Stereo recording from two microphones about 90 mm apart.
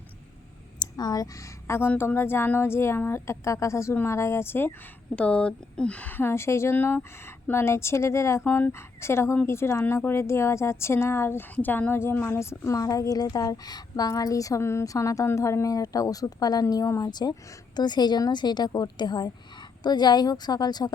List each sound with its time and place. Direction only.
0.8 s speech: 50° left (ahead or behind); by 4.7 s 25° left (ahead or behind)
5.1 s a woman's voice: 15° left (ahead or behind); by 20.9 s 50° left (ahead or behind)